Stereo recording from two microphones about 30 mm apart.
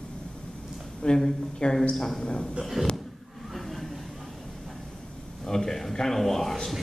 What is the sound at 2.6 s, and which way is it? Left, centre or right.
Speech, centre.